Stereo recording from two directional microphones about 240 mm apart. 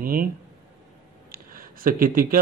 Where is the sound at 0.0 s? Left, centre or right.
Right.